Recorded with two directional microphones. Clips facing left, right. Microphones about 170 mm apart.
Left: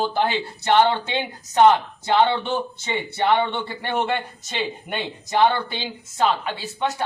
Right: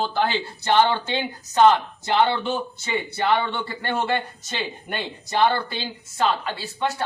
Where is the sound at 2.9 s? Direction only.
20° left (ahead or behind).